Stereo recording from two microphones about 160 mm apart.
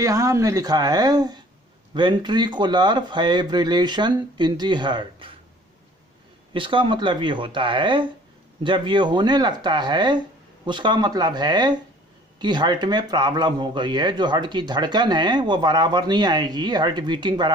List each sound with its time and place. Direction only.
0.0 s speech: 20° right (ahead or behind)
6.5 s speech: 30° right (ahead or behind)